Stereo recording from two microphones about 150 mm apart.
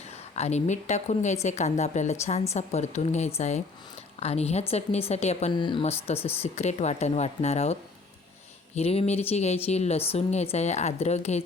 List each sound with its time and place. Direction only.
0.3 s speech: 45° left (ahead or behind)
5.5 s speech: 30° left (ahead or behind)
6.1 s speech: 45° left (ahead or behind)